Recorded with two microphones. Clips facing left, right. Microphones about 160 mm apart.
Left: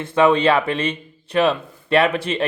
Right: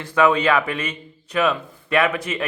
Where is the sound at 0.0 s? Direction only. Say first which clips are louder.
Left 2 dB; 25° left (ahead or behind).